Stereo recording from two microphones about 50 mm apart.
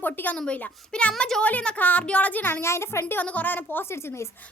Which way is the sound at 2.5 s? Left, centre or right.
Left.